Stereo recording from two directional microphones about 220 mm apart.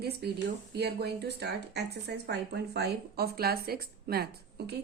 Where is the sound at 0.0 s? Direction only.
45° right (ahead or behind).